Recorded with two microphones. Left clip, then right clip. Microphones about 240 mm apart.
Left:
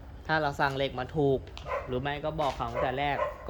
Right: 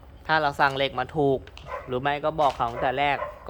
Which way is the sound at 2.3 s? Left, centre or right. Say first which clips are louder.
Right 7 dB; right.